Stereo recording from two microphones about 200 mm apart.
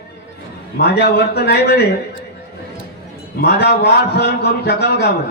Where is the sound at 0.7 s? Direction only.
55° left (ahead or behind).